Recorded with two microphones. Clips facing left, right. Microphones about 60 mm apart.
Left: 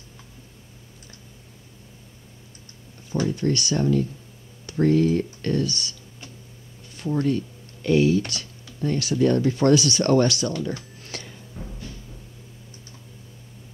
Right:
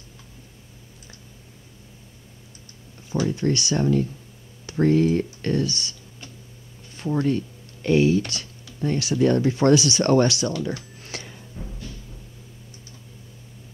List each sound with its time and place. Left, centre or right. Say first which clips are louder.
3.1 s speech: right 1 dB; centre
7.0 s speech: even; right
10.6 s a sound: right 1 dB; centre